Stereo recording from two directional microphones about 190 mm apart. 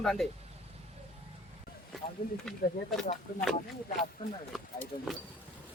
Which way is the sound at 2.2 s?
45° left (ahead or behind).